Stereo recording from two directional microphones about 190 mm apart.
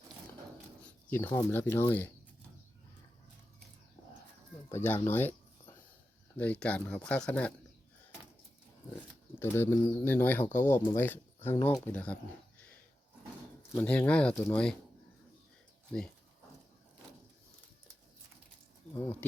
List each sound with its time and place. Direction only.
0.9 s speech: 10° left (ahead or behind)
4.7 s speech: 10° left (ahead or behind)
9.4 s speech: 10° left (ahead or behind)
11.9 s speech: 5° left (ahead or behind)
13.7 s speech: 10° left (ahead or behind)